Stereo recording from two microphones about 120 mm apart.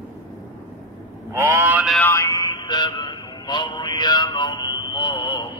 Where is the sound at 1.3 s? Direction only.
20° right (ahead or behind).